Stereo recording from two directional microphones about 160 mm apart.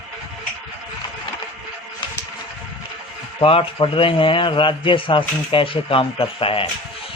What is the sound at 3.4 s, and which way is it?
A man's voice, 35° left (ahead or behind).